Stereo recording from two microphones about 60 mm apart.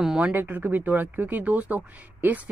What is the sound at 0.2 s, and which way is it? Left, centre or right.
Speech, right.